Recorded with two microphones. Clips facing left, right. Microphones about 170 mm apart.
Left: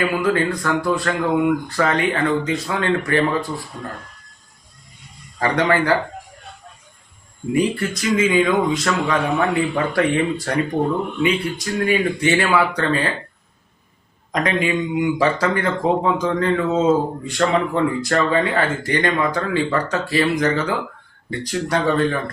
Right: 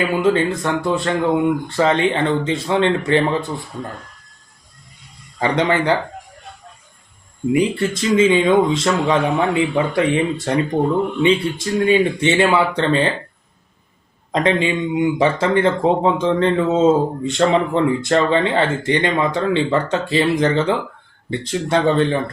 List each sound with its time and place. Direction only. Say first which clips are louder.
0.2 s speech: right 3 dB; 25° right (ahead or behind)
5.4 s speech: right 1 dB; 20° right (ahead or behind)
7.5 s speech: right 2 dB; 25° right (ahead or behind)
14.3 s speech: right 3 dB; 25° right (ahead or behind)